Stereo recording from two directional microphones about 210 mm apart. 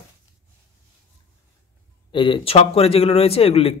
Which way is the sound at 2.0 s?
25° left (ahead or behind).